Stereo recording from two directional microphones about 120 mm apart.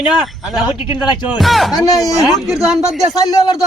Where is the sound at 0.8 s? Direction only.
40° left (ahead or behind).